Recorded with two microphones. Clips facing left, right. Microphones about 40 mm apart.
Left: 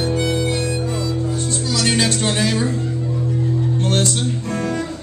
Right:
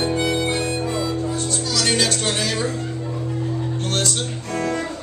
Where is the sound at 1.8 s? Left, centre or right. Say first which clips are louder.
Left 2 dB; left.